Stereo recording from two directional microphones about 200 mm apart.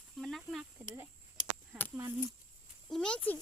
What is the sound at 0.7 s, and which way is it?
Speech, 10° right (ahead or behind).